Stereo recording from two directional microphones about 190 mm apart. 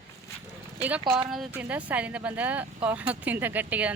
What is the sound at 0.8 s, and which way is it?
Speech, 10° right (ahead or behind).